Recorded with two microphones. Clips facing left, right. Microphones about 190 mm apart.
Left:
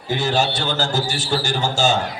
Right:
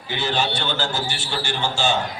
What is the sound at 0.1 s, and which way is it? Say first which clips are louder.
A man's voice: left 4 dB; 45° left (ahead or behind).